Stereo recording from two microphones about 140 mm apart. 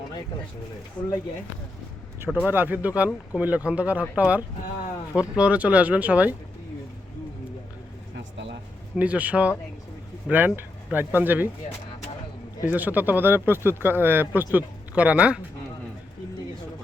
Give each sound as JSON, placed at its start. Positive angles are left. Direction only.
{"t": 1.0, "sound": "speech", "side_deg": 35}
{"t": 2.5, "sound": "speech", "side_deg": -15}
{"t": 9.0, "sound": "speech", "side_deg": -10}
{"t": 12.6, "sound": "speech", "side_deg": -10}